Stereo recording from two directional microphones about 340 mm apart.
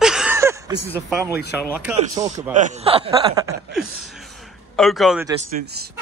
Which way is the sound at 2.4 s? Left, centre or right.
Right.